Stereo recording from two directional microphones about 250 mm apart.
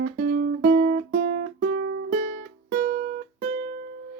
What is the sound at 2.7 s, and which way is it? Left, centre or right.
Music, right.